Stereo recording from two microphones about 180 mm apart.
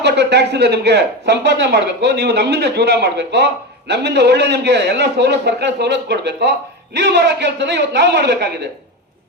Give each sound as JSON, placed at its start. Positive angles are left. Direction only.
{"t": 0.0, "sound": "speech", "side_deg": -70}